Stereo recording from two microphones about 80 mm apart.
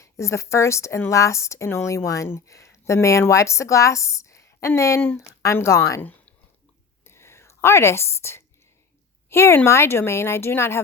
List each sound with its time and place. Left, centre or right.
0.0 s speech: left
6.0 s a sound: left
7.0 s whispering: left
9.3 s speech: left